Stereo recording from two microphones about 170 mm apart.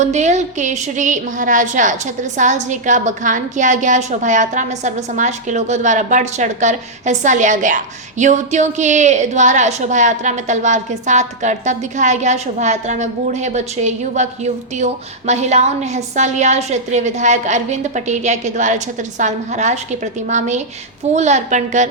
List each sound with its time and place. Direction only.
0.0 s a woman's voice: 45° right (ahead or behind)
21.1 s a woman's voice: 40° right (ahead or behind)